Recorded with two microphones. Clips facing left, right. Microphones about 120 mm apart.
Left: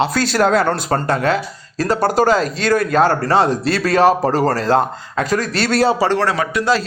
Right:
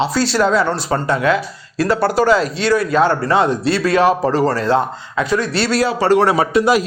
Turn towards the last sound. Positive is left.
turn(degrees=-20)  # may be behind; listen again after turning